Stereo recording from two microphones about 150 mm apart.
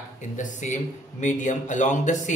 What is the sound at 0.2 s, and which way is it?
Speech, 55° left (ahead or behind).